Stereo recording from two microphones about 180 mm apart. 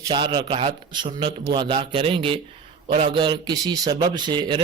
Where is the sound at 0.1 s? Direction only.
25° right (ahead or behind).